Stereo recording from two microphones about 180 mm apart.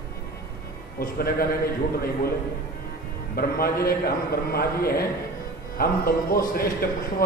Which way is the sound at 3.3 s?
55° left (ahead or behind).